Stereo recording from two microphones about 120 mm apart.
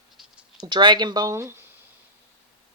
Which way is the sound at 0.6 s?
40° right (ahead or behind).